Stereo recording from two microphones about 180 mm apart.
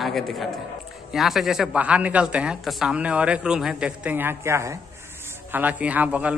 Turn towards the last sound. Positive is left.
turn(degrees=-10)  # may be behind; listen again after turning